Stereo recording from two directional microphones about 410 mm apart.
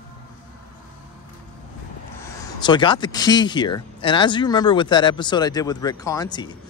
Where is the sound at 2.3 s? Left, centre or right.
Centre.